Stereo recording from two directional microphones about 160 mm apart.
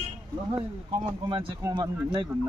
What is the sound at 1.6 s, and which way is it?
Speech, 25° right (ahead or behind).